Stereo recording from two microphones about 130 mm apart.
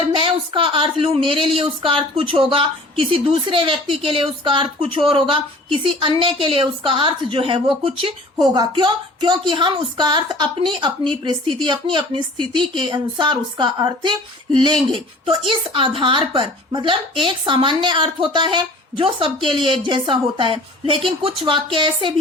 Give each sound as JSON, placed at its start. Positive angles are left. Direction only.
{"t": 0.1, "sound": "a woman's voice", "side_deg": -40}